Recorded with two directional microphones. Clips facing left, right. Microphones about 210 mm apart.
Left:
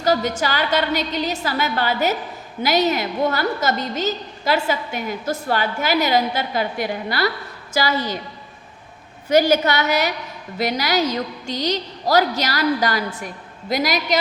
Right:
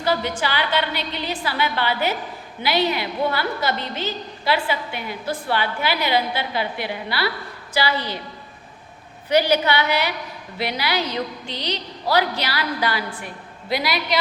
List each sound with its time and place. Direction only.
0.0 s a woman's voice: 45° left (ahead or behind)
9.3 s a woman's voice: 45° left (ahead or behind)